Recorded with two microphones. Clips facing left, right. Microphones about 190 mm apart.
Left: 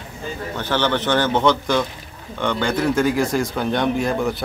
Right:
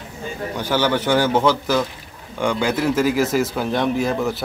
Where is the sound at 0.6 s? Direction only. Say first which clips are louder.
Right 1 dB; 10° right (ahead or behind).